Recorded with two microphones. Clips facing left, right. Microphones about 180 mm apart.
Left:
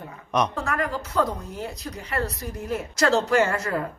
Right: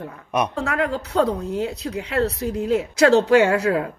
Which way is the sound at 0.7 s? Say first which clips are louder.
Right 4 dB; 65° right (ahead or behind).